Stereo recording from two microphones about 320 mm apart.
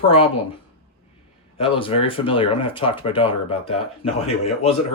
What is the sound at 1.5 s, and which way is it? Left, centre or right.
Speech, centre.